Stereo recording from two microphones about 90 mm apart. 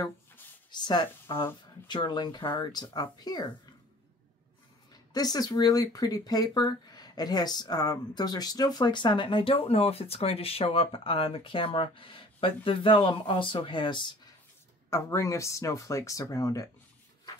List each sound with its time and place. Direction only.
0.7 s speech: 55° left (ahead or behind)
5.1 s speech: 45° left (ahead or behind); by 14.1 s 60° left (ahead or behind)
14.9 s speech: 35° left (ahead or behind)